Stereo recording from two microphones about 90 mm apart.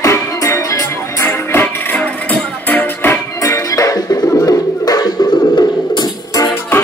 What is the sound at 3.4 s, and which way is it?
Music, 35° left (ahead or behind).